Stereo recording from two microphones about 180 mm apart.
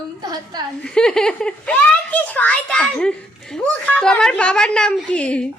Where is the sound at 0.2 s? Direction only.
20° right (ahead or behind).